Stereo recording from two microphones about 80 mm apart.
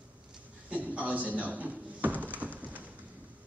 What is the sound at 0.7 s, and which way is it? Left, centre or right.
Speech, centre.